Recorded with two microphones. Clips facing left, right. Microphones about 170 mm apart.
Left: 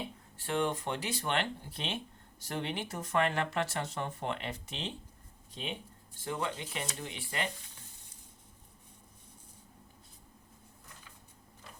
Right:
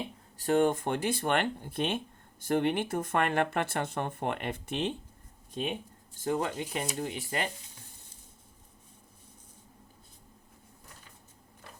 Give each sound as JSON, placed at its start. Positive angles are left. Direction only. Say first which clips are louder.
{"t": 0.3, "sound": "speech", "louder": "right 7 dB", "side_deg": -45}